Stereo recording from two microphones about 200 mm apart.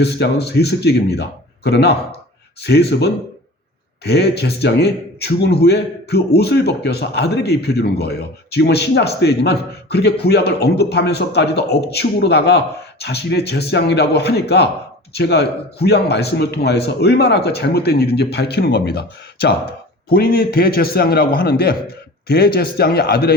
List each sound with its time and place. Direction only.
0.0 s a man's voice: 55° left (ahead or behind)